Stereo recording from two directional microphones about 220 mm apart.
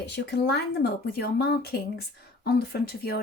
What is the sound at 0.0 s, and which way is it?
Speech, 50° left (ahead or behind).